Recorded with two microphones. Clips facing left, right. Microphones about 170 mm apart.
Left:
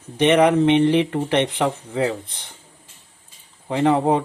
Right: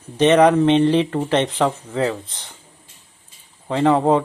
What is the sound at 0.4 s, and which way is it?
Speech, 15° left (ahead or behind).